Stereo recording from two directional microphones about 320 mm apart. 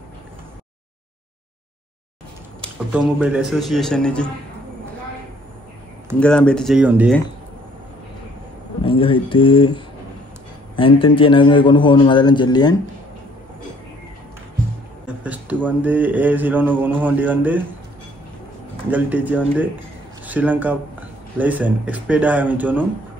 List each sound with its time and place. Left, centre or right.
2.9 s speech: centre
6.1 s speech: centre
8.8 s a man's voice: centre
15.2 s speech: centre
18.9 s speech: centre